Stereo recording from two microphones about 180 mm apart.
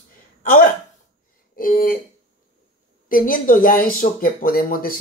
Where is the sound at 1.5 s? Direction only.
50° left (ahead or behind).